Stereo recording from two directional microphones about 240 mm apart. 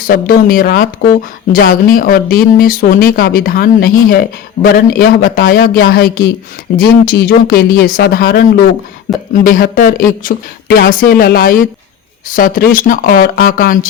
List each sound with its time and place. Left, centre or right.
0.0 s speech: left